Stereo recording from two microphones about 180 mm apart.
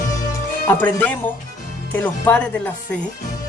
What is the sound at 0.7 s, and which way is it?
Speech, 10° left (ahead or behind).